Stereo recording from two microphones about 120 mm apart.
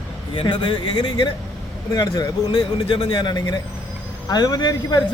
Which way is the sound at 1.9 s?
30° left (ahead or behind).